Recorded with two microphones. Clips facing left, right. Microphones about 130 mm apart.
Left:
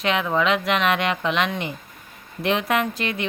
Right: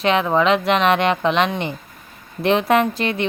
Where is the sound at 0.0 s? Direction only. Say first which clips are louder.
Right 5 dB; 30° right (ahead or behind).